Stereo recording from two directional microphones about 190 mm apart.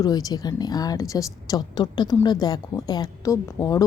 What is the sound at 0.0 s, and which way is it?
Speech, 20° left (ahead or behind).